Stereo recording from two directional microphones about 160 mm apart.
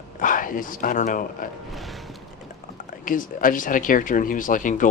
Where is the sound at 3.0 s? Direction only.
55° left (ahead or behind).